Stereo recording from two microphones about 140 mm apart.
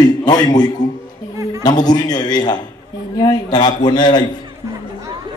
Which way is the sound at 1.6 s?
30° left (ahead or behind).